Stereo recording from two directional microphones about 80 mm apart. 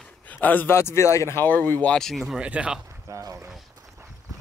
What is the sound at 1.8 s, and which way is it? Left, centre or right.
Speech, centre.